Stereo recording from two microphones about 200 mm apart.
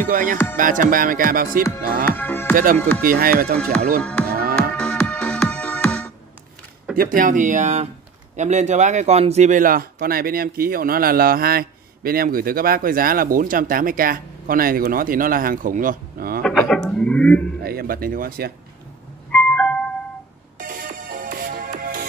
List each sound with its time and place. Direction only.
0.1 s speech: 45° right (ahead or behind)
2.0 s music: 10° left (ahead or behind)
2.5 s speech: 45° right (ahead or behind)
4.0 s music: 5° left (ahead or behind)
4.3 s music: 50° right (ahead or behind)
4.6 s music: 5° left (ahead or behind)
7.0 s speech: 45° right (ahead or behind)
16.4 s speech: centre (ahead or behind)
17.6 s speech: 50° right (ahead or behind)
19.3 s music: 5° left (ahead or behind)
20.5 s music: 45° right (ahead or behind)